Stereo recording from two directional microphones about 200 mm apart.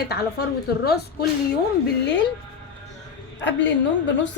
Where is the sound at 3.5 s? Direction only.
60° left (ahead or behind).